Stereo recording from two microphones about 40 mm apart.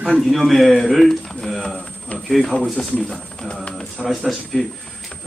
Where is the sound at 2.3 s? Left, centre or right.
Centre.